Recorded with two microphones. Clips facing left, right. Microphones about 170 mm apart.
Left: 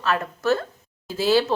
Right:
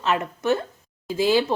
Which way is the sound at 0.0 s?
20° right (ahead or behind).